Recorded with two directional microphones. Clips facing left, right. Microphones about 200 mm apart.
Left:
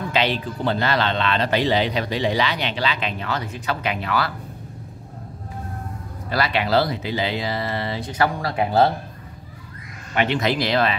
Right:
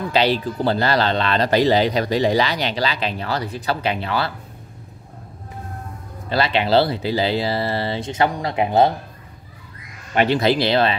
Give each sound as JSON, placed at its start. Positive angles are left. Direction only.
{"t": 0.1, "sound": "speech", "side_deg": -35}
{"t": 6.2, "sound": "speech", "side_deg": -25}
{"t": 10.1, "sound": "speech", "side_deg": -35}